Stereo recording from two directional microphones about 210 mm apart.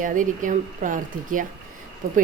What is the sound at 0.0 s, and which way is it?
Speech, 40° right (ahead or behind).